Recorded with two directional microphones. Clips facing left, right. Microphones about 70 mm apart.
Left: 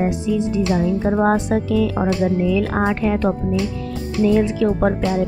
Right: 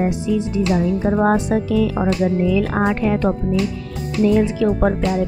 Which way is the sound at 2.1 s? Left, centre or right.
Left.